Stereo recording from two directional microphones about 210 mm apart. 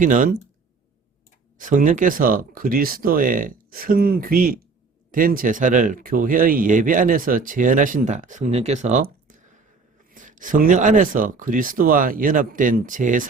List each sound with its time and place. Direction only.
0.0 s speech: 40° right (ahead or behind)
1.5 s speech: 40° right (ahead or behind)